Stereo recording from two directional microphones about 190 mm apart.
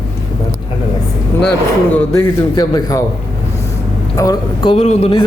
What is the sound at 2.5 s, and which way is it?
Speech, 20° left (ahead or behind).